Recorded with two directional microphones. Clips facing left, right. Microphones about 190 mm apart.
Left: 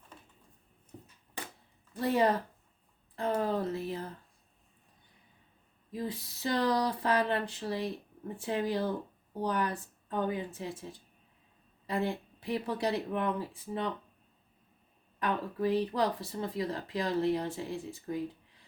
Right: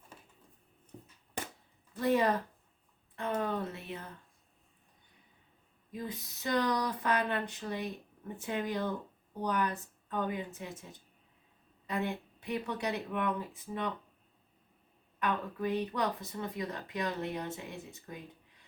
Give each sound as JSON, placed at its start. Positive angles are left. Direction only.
{"t": 2.0, "sound": "speech", "side_deg": 30}
{"t": 5.9, "sound": "speech", "side_deg": 30}
{"t": 11.9, "sound": "speech", "side_deg": 30}
{"t": 15.2, "sound": "speech", "side_deg": 30}